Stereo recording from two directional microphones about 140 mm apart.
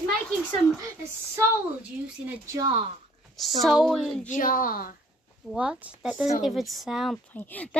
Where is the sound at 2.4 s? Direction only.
20° right (ahead or behind).